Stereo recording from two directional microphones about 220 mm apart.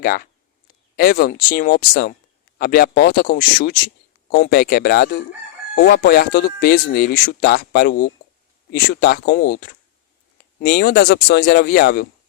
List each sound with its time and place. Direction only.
0.0 s speech: 40° left (ahead or behind)
10.6 s speech: 45° left (ahead or behind)